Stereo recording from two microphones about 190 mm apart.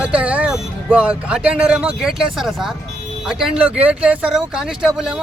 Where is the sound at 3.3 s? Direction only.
5° right (ahead or behind).